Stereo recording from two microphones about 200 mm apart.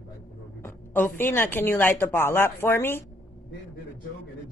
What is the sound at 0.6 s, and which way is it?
A woman's voice, 10° left (ahead or behind).